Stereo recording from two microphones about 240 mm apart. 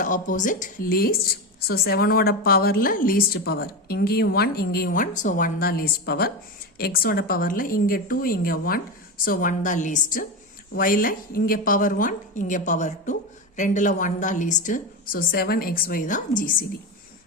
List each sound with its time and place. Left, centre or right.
0.0 s a woman's voice: left